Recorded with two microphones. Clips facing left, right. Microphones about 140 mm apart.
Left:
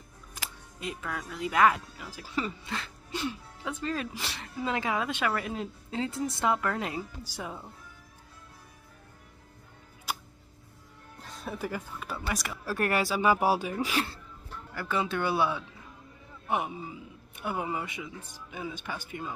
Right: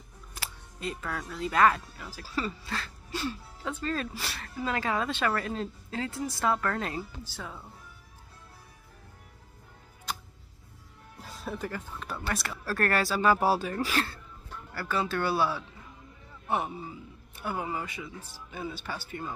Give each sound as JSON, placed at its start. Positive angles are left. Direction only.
{"t": 0.4, "sound": "music", "side_deg": 10}
{"t": 1.3, "sound": "a man's voice", "side_deg": 15}
{"t": 10.1, "sound": "music", "side_deg": 10}
{"t": 11.1, "sound": "a man's voice", "side_deg": -5}